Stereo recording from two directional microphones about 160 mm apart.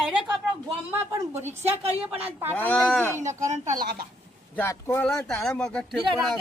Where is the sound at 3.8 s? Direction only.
70° right (ahead or behind).